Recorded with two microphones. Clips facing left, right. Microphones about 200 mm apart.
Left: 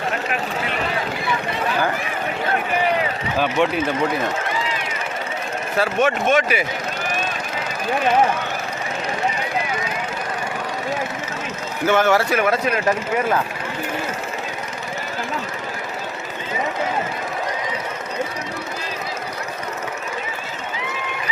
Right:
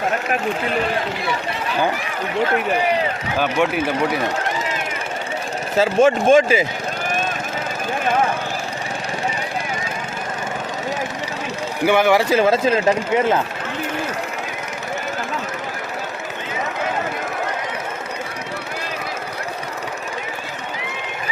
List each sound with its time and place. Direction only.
3.3 s speech: centre (ahead or behind)
5.7 s speech: 25° right (ahead or behind)
11.9 s speech: 15° right (ahead or behind)
12.4 s speech: 25° right (ahead or behind)